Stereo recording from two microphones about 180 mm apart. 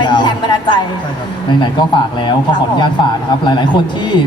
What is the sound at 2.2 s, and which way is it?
Speech, 25° left (ahead or behind).